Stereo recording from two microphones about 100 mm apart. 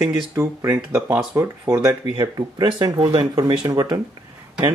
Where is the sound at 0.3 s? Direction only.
30° right (ahead or behind).